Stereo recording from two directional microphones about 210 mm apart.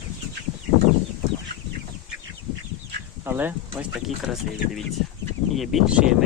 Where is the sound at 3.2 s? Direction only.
10° right (ahead or behind).